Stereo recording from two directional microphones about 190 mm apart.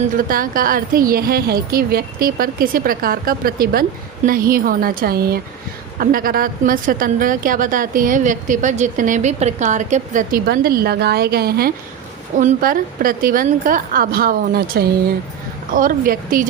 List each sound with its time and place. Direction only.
0.2 s a woman's voice: 50° right (ahead or behind)
12.4 s a woman's voice: 45° right (ahead or behind)